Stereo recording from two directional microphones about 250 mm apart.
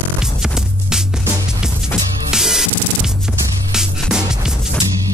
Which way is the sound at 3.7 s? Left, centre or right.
Centre.